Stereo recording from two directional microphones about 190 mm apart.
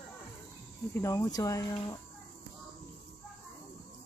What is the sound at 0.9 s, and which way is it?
Speech, 15° left (ahead or behind).